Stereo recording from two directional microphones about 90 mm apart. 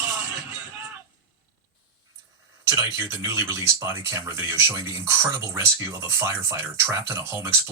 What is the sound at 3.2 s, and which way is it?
Speech, 30° right (ahead or behind).